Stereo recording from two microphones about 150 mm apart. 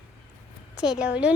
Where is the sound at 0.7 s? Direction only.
5° right (ahead or behind).